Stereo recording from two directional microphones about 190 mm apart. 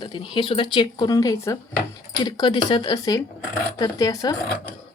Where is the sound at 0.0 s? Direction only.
25° left (ahead or behind).